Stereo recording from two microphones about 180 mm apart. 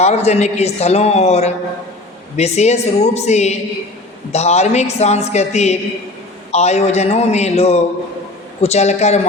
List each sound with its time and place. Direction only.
0.0 s a man's voice: 35° left (ahead or behind)